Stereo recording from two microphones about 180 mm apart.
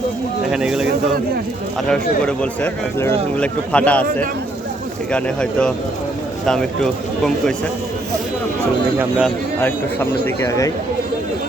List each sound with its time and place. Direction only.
0.5 s speech: 5° right (ahead or behind)
1.9 s speech: 5° left (ahead or behind)
5.1 s speech: 5° left (ahead or behind)
9.0 s speech: 5° right (ahead or behind)
9.6 s speech: 10° left (ahead or behind)